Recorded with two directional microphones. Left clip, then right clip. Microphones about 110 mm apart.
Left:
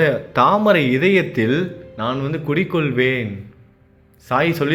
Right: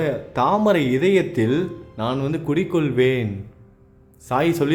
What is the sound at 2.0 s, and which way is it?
Speech, 30° right (ahead or behind).